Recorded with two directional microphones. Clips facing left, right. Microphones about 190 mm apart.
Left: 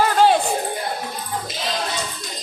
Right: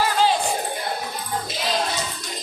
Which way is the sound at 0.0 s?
55° left (ahead or behind).